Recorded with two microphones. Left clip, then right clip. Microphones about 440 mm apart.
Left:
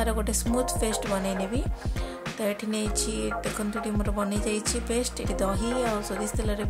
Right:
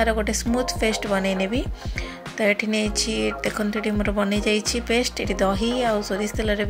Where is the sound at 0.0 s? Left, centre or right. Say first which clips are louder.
Right 7 dB; left.